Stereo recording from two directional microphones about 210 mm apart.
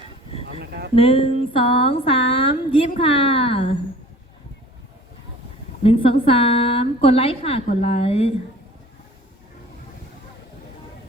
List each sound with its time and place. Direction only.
0.6 s speech: 50° right (ahead or behind)
0.9 s a woman's voice: 25° left (ahead or behind)
5.8 s a woman's voice: 25° left (ahead or behind)